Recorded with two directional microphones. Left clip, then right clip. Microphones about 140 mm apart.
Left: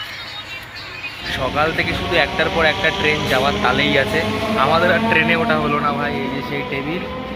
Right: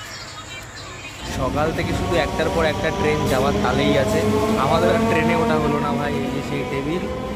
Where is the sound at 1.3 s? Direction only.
15° right (ahead or behind).